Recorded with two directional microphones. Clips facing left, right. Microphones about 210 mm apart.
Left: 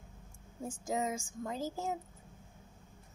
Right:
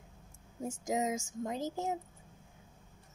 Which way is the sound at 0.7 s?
20° right (ahead or behind).